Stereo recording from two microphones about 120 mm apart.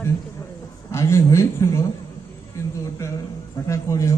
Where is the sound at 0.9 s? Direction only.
25° left (ahead or behind).